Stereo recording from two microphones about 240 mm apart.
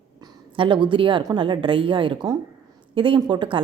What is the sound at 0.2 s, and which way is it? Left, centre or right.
A woman's voice, right.